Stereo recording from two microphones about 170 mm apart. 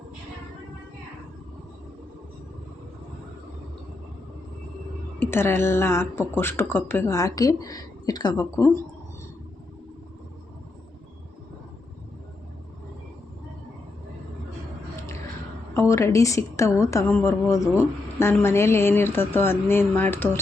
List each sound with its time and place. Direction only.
5.2 s speech: 15° left (ahead or behind)
15.7 s speech: 15° left (ahead or behind)